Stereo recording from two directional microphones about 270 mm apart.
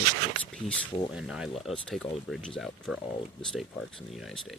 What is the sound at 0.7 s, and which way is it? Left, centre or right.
Speech, centre.